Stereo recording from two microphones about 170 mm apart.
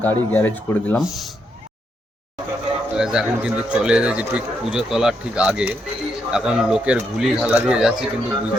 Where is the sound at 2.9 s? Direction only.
5° right (ahead or behind).